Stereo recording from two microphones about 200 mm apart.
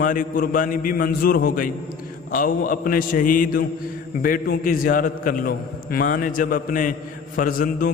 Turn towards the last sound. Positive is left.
turn(degrees=45)  # may be behind; listen again after turning